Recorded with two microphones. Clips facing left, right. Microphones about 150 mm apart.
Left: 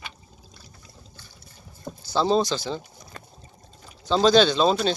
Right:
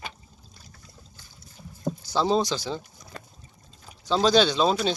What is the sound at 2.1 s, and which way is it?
Speech, 10° right (ahead or behind).